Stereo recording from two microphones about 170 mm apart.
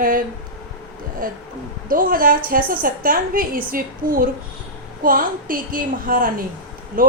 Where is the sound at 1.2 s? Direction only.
55° right (ahead or behind).